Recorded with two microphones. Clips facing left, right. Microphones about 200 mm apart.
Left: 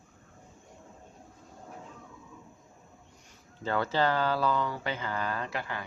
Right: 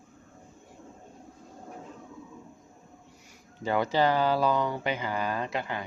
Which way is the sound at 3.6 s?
15° right (ahead or behind).